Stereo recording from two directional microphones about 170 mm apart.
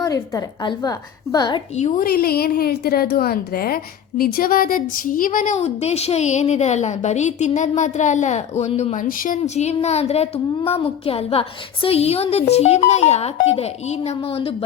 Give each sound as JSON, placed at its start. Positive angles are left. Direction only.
{"t": 0.0, "sound": "a woman's voice", "side_deg": 20}
{"t": 1.7, "sound": "a woman's voice", "side_deg": 45}
{"t": 2.0, "sound": "a woman's voice", "side_deg": 65}